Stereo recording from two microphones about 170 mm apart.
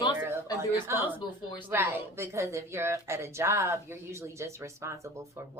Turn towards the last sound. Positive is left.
turn(degrees=-15)  # may be behind; listen again after turning